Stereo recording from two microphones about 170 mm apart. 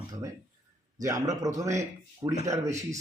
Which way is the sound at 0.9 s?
20° right (ahead or behind).